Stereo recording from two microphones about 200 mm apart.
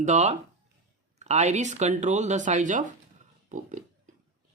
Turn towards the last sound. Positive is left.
turn(degrees=-35)  # may be behind; listen again after turning